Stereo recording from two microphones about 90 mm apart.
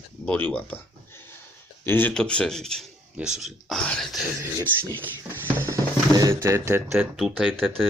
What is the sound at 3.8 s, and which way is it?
Speech, 10° left (ahead or behind).